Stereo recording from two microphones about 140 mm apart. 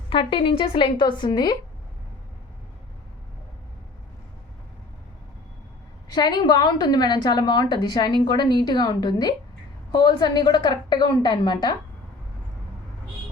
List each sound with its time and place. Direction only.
0.1 s a woman's voice: 40° left (ahead or behind)
6.1 s a woman's voice: 30° left (ahead or behind)